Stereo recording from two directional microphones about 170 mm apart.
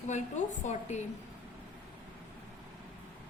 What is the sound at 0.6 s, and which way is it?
Speech, 40° left (ahead or behind).